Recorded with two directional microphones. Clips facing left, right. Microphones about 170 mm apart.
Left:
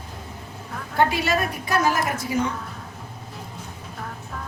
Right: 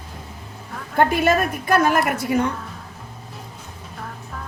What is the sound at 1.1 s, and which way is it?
A woman's voice, 50° right (ahead or behind).